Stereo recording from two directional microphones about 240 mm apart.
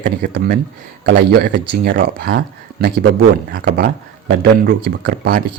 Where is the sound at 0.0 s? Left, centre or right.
Right.